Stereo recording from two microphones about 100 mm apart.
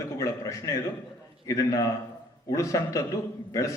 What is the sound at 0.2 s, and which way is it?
A man's voice, 30° left (ahead or behind).